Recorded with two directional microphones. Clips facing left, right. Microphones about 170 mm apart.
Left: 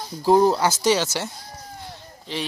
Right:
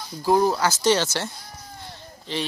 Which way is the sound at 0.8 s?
10° left (ahead or behind).